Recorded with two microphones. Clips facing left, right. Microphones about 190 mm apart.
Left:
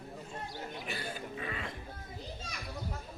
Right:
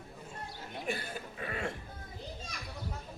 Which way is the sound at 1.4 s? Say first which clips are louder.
Right 5 dB; 45° right (ahead or behind).